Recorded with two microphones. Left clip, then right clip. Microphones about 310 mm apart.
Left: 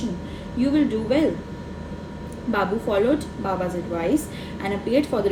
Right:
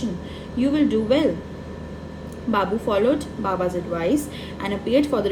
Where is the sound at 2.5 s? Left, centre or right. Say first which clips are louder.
Right 1 dB; right.